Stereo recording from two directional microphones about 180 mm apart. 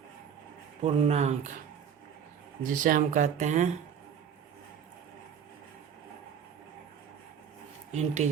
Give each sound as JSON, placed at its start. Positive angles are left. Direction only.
{"t": 0.8, "sound": "speech", "side_deg": -35}
{"t": 2.6, "sound": "speech", "side_deg": -50}
{"t": 7.9, "sound": "speech", "side_deg": -40}